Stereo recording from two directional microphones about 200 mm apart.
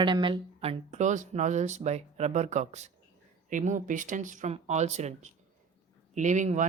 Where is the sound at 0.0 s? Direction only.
25° right (ahead or behind).